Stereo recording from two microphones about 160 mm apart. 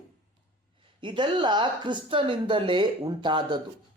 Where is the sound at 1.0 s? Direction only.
30° right (ahead or behind).